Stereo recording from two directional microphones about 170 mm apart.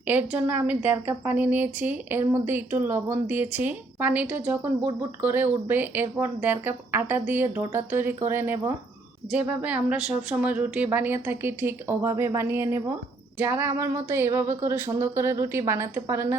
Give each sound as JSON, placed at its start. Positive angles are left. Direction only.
{"t": 0.1, "sound": "a woman's voice", "side_deg": -10}